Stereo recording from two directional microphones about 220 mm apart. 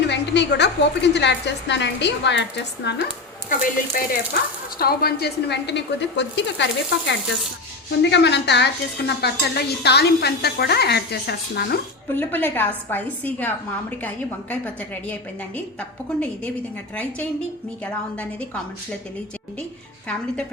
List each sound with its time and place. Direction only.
0.1 s stir: 50° left (ahead or behind)
3.6 s speech: 40° left (ahead or behind)
4.8 s stir: 45° left (ahead or behind)
8.1 s stir: 50° left (ahead or behind)
12.0 s a woman's voice: 10° left (ahead or behind)